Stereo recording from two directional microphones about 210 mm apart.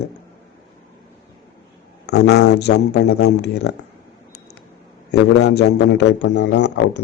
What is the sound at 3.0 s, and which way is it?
Speech, 55° left (ahead or behind).